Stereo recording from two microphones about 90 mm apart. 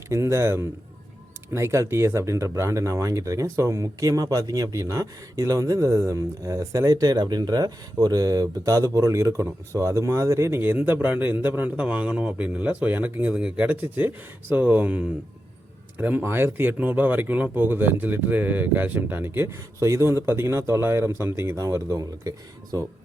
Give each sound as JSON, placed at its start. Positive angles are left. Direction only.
{"t": 0.1, "sound": "speech", "side_deg": -30}